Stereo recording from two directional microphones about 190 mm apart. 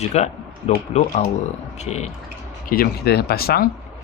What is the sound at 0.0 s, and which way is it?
Speech, 35° left (ahead or behind).